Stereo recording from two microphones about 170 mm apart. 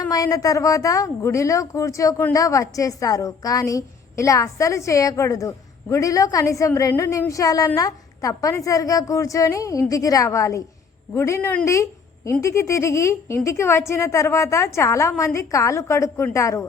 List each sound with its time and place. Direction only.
0.1 s a woman's voice: 20° left (ahead or behind)